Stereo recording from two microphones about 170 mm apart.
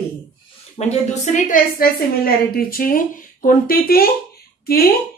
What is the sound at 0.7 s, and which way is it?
A woman's voice, 40° left (ahead or behind).